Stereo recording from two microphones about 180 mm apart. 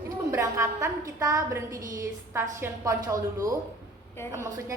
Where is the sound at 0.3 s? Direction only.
15° right (ahead or behind).